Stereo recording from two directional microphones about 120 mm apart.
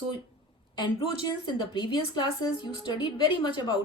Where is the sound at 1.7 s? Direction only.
45° left (ahead or behind).